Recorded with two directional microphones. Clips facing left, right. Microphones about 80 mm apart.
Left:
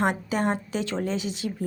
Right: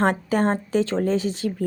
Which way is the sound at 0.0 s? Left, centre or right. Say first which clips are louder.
Right 4 dB; right.